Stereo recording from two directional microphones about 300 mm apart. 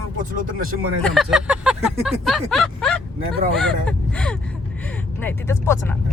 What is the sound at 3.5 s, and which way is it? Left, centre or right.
Speech, centre.